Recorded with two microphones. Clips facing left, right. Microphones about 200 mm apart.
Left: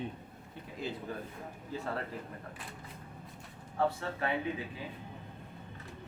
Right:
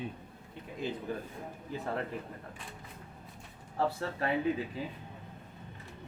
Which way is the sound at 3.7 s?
35° right (ahead or behind).